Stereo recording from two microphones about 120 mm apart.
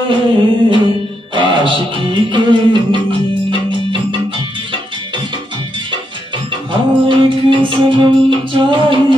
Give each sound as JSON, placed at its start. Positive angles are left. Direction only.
{"t": 0.1, "sound": "music", "side_deg": -45}
{"t": 6.7, "sound": "music", "side_deg": -45}